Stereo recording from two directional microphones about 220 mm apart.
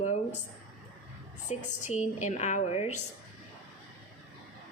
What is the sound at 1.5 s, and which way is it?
A woman's voice, 30° left (ahead or behind).